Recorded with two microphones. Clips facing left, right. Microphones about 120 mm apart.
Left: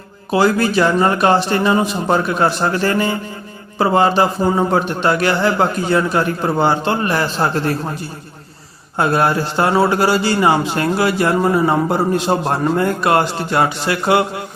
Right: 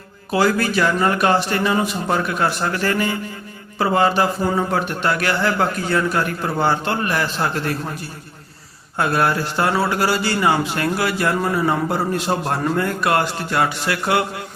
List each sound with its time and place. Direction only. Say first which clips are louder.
0.3 s a man's voice: left 3 dB; 25° left (ahead or behind)
9.0 s a man's voice: left 3 dB; 25° left (ahead or behind)